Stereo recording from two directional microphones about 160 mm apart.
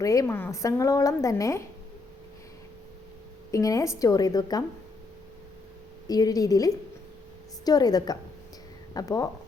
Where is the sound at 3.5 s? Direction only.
20° left (ahead or behind).